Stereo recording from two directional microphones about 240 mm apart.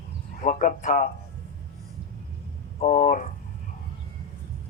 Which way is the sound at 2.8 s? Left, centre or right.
Left.